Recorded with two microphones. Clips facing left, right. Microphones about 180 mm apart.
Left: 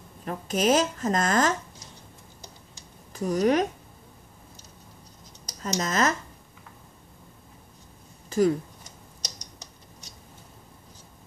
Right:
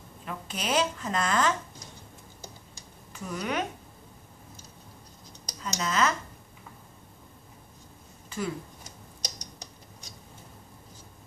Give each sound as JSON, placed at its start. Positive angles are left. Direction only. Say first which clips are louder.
{"t": 0.2, "sound": "speech", "louder": "left 10 dB", "side_deg": 45}
{"t": 3.1, "sound": "speech", "louder": "left 10 dB", "side_deg": 40}
{"t": 5.6, "sound": "speech", "louder": "left 2 dB", "side_deg": 40}
{"t": 8.3, "sound": "speech", "louder": "left 11 dB", "side_deg": 40}